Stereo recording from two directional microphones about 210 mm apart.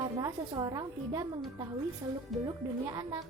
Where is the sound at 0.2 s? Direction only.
20° right (ahead or behind).